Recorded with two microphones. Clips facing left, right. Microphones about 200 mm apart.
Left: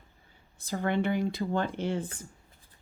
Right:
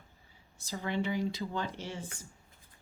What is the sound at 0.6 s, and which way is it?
Speech, 55° left (ahead or behind).